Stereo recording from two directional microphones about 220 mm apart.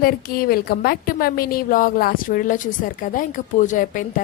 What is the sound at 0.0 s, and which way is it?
A woman's voice, 40° left (ahead or behind).